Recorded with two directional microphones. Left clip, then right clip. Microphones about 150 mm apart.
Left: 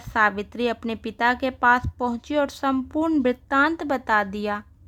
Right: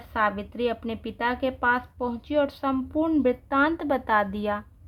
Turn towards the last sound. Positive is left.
turn(degrees=25)  # may be behind; listen again after turning